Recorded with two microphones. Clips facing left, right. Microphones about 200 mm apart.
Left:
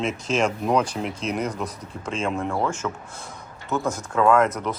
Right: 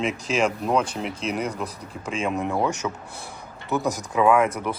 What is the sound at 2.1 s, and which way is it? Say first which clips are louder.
Speech: right 1 dB; 15° right (ahead or behind).